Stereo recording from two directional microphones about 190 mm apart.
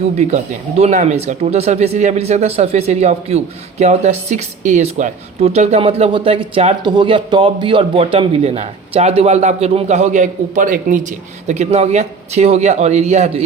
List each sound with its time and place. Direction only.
0.2 s speech: 35° right (ahead or behind)